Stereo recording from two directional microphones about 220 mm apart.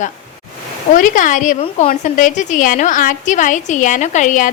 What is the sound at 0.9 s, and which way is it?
A woman's voice, 35° left (ahead or behind).